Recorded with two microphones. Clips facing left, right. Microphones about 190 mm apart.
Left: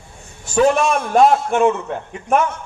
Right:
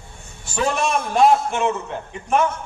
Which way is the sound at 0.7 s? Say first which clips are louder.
Left 4 dB; 50° left (ahead or behind).